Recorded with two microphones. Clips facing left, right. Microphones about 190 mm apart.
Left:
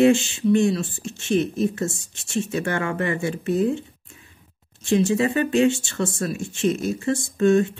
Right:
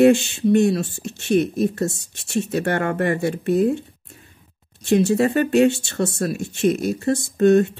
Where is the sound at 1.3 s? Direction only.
40° right (ahead or behind).